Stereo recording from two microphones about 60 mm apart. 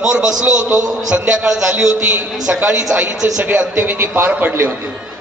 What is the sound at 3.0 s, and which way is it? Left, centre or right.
Speech, centre.